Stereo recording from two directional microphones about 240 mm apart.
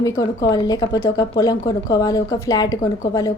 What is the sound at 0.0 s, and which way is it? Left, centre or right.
A woman's voice, centre.